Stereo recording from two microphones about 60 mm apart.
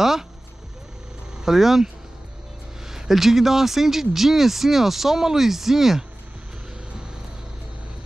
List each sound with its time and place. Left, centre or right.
1.4 s speech: centre
2.9 s speech: centre